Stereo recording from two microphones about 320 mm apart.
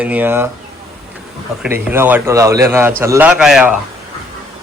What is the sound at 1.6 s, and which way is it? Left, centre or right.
A man's voice, centre.